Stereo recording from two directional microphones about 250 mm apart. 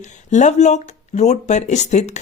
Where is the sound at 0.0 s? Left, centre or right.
Left.